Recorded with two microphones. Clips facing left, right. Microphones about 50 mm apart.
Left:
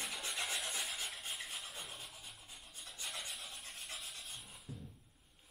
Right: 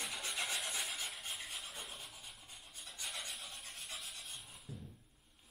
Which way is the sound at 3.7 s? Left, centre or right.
Centre.